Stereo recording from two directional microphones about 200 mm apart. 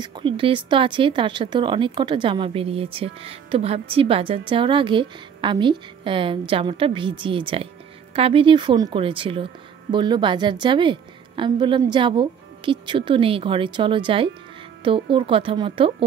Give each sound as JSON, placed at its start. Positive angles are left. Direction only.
{"t": 0.0, "sound": "speech", "side_deg": -25}